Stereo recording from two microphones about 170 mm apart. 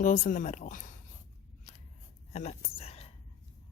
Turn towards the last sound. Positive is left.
turn(degrees=35)  # may be behind; listen again after turning